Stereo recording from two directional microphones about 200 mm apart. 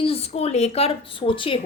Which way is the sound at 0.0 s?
30° left (ahead or behind).